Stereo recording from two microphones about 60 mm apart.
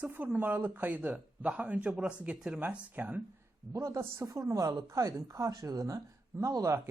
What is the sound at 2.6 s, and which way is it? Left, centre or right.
Speech, right.